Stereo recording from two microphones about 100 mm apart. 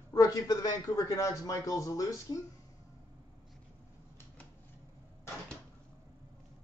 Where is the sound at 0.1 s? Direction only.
35° left (ahead or behind).